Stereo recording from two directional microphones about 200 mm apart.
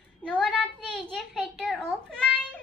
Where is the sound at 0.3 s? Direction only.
5° left (ahead or behind).